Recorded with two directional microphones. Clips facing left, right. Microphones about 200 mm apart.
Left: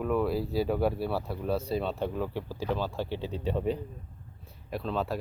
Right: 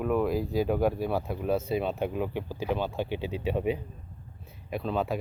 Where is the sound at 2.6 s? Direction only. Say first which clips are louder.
Right 2 dB; centre (ahead or behind).